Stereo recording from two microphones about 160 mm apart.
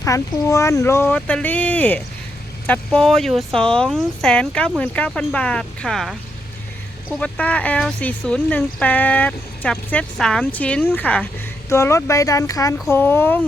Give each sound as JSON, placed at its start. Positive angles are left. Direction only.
{"t": 0.0, "sound": "speech", "side_deg": 20}
{"t": 7.2, "sound": "speech", "side_deg": 10}